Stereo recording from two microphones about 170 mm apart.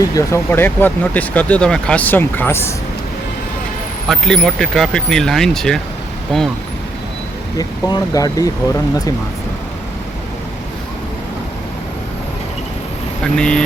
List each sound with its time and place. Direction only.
0.1 s speech: 15° left (ahead or behind)
4.1 s speech: centre (ahead or behind)
7.6 s speech: 25° left (ahead or behind)
13.3 s speech: 5° left (ahead or behind)